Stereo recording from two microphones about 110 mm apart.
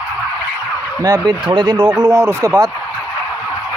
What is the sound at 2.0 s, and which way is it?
Speech, 25° right (ahead or behind).